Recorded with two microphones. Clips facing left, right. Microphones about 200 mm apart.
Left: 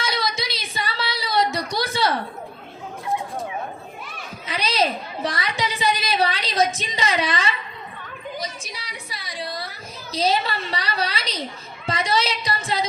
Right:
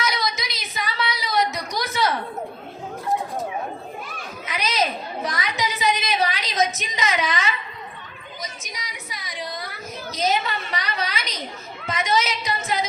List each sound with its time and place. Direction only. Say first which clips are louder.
0.0 s female singing: even; 30° left (ahead or behind)
4.4 s a sound: left 2 dB; 30° left (ahead or behind)
11.9 s female singing: even; 30° left (ahead or behind)